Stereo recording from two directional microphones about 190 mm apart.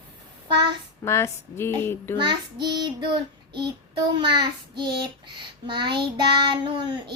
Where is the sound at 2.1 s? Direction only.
25° right (ahead or behind).